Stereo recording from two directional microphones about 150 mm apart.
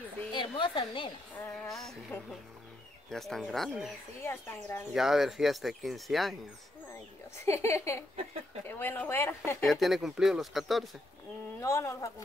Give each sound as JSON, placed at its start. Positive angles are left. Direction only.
{"t": 0.3, "sound": "speech", "side_deg": 30}
{"t": 1.4, "sound": "speech", "side_deg": 5}
{"t": 4.2, "sound": "speech", "side_deg": 15}
{"t": 4.9, "sound": "speech", "side_deg": 0}
{"t": 7.4, "sound": "speech", "side_deg": 20}
{"t": 9.7, "sound": "speech", "side_deg": 0}
{"t": 11.6, "sound": "speech", "side_deg": 20}